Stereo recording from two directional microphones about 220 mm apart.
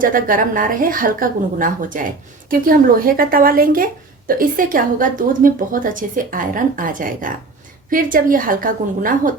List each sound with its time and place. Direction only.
0.0 s a woman's voice: 40° right (ahead or behind)